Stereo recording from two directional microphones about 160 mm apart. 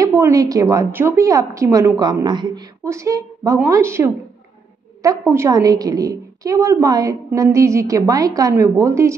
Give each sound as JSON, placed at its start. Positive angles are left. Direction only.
{"t": 0.0, "sound": "a woman's voice", "side_deg": -20}
{"t": 5.2, "sound": "a woman's voice", "side_deg": -15}